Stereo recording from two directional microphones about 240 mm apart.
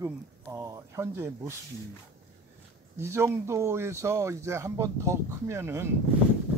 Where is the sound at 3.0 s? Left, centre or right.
Centre.